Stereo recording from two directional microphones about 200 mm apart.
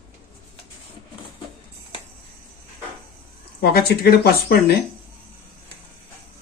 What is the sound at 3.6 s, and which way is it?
Speech, 50° left (ahead or behind).